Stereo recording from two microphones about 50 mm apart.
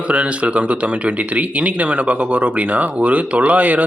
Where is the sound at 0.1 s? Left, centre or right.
Right.